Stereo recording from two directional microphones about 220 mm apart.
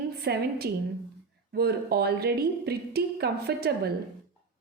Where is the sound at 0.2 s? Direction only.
45° right (ahead or behind).